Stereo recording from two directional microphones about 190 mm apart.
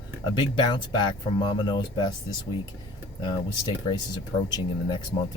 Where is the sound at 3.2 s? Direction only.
25° left (ahead or behind).